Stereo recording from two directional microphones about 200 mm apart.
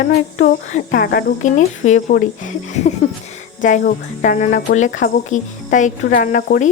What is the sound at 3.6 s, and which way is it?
Speech, 40° left (ahead or behind).